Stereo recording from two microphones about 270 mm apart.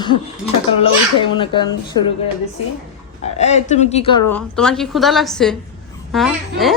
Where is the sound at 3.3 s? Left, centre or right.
Left.